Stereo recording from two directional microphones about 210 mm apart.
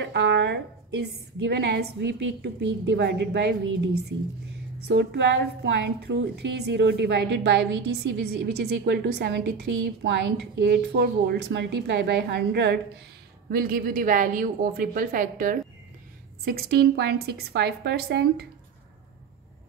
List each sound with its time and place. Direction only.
0.0 s a woman's voice: 55° right (ahead or behind)
13.5 s a woman's voice: 40° right (ahead or behind)